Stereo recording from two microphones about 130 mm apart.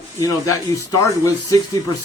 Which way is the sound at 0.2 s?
25° left (ahead or behind).